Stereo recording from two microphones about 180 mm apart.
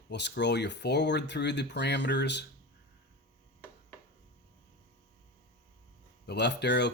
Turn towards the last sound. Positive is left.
turn(degrees=70)  # may be behind; listen again after turning